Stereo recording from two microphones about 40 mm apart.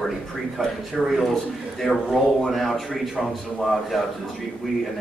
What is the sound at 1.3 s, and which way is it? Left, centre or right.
Speech, centre.